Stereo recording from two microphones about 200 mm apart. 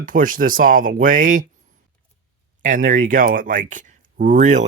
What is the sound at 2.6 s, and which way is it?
Speech, 40° right (ahead or behind).